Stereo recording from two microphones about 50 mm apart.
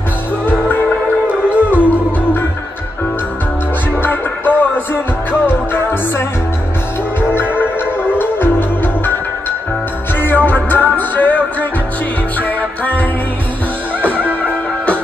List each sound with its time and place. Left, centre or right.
1.2 s music: right
4.0 s music: left
10.2 s music: left
14.0 s music: right